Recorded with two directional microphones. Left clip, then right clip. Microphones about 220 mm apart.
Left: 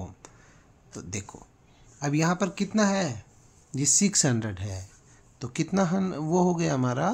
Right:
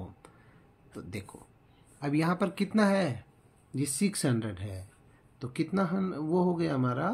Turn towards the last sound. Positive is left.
turn(degrees=35)  # may be behind; listen again after turning